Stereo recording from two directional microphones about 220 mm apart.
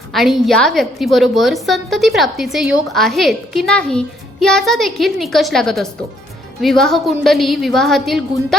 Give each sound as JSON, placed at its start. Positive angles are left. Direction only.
{"t": 0.1, "sound": "a woman's voice", "side_deg": 0}